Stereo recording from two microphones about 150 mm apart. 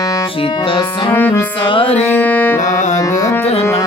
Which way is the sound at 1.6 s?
35° left (ahead or behind).